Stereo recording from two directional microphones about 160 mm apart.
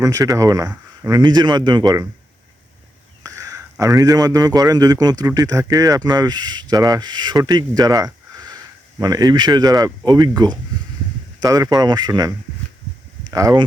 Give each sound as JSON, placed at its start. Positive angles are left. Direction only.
{"t": 0.0, "sound": "a man's voice", "side_deg": -20}
{"t": 3.2, "sound": "a man's voice", "side_deg": -20}
{"t": 13.3, "sound": "a man's voice", "side_deg": -25}